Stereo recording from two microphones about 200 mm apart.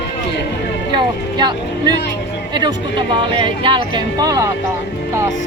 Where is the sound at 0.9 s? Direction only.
20° right (ahead or behind).